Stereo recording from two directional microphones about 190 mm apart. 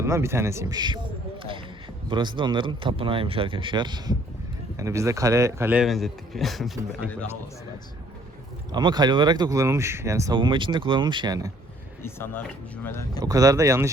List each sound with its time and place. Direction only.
0.0 s speech: 15° right (ahead or behind)
1.4 s a sound: 25° right (ahead or behind)
2.0 s speech: 25° right (ahead or behind); by 7.3 s 5° left (ahead or behind)
8.7 s speech: 20° right (ahead or behind)
12.0 s speech: 10° left (ahead or behind)
13.2 s speech: 20° right (ahead or behind)